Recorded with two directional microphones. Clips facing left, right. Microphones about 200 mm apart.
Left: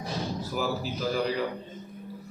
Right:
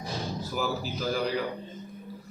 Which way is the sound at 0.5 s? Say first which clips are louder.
Even; centre (ahead or behind).